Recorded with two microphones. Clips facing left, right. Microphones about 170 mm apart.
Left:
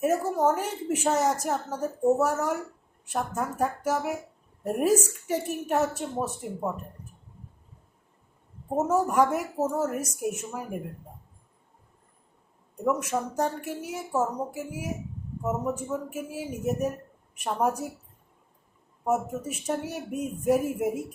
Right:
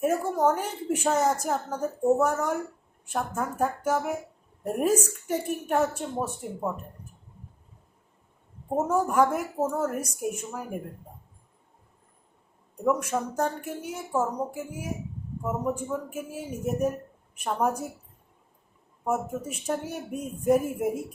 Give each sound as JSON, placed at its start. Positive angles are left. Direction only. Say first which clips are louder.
{"t": 0.0, "sound": "a woman's voice", "louder": "even", "side_deg": 5}
{"t": 8.7, "sound": "a woman's voice", "louder": "even", "side_deg": 5}
{"t": 12.8, "sound": "a woman's voice", "louder": "right 1 dB", "side_deg": 5}
{"t": 19.0, "sound": "a woman's voice", "louder": "left 1 dB", "side_deg": 5}